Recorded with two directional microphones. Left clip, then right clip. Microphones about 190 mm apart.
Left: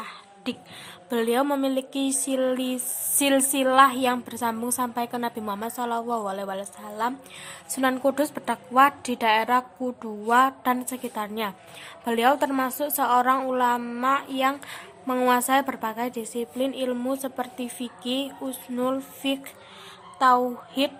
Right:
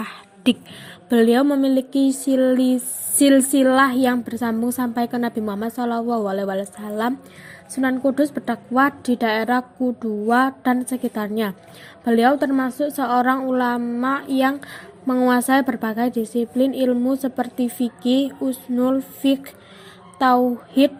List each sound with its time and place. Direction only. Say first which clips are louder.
0.0 s whispering: right 11 dB; 35° right (ahead or behind)
1.1 s a woman's voice: right 7 dB; 20° right (ahead or behind)
7.8 s a woman's voice: right 3 dB; centre (ahead or behind)
13.8 s a woman's voice: right 3 dB; centre (ahead or behind)
14.1 s a woman's voice: right 2 dB; 20° right (ahead or behind)